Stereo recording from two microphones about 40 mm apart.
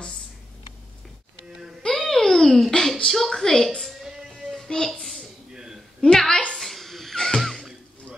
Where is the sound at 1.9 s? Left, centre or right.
Centre.